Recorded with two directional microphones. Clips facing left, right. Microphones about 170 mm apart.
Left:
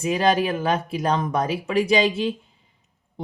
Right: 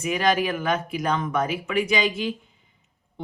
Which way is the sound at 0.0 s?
30° left (ahead or behind).